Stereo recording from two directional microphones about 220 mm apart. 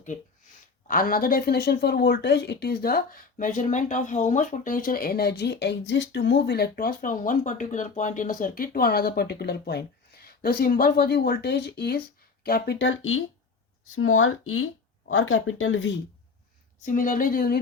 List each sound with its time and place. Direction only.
0.0 s speech: 35° left (ahead or behind); by 15.9 s 65° left (ahead or behind)
16.8 s a woman's voice: 35° left (ahead or behind)